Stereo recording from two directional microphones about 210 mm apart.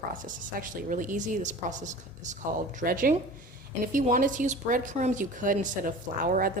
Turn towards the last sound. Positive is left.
turn(degrees=-40)  # may be behind; listen again after turning